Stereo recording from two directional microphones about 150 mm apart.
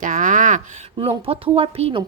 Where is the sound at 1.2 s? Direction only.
40° right (ahead or behind).